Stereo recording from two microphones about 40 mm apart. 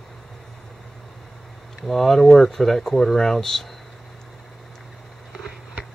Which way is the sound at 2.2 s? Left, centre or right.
Centre.